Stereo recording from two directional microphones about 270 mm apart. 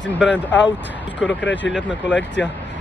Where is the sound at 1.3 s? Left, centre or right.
Left.